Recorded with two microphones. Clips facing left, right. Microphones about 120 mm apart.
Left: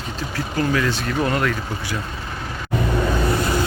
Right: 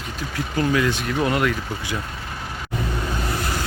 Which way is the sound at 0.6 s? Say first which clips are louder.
Even; 15° right (ahead or behind).